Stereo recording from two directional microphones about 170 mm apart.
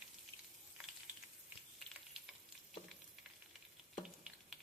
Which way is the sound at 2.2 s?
Centre (ahead or behind).